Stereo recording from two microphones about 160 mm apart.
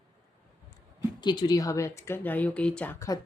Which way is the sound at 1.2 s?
25° left (ahead or behind).